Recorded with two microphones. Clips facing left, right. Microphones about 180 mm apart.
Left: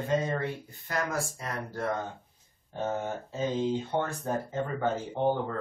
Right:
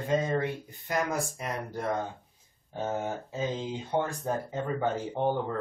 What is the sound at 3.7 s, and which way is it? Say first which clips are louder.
Speech: left 1 dB; 15° right (ahead or behind).